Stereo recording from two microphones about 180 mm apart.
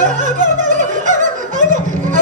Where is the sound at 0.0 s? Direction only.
45° right (ahead or behind).